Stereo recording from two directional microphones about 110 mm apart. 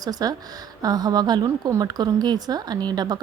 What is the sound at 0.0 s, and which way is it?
Speech, 35° right (ahead or behind).